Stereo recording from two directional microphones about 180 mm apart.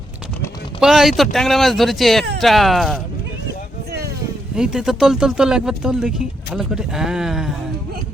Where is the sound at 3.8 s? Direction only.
65° right (ahead or behind).